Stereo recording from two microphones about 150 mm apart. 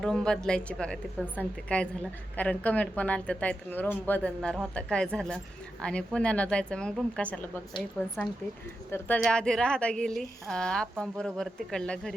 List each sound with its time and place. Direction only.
0.0 s speech: 5° left (ahead or behind)